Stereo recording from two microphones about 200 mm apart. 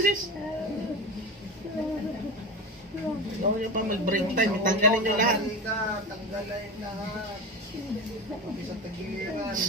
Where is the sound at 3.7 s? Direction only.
40° right (ahead or behind).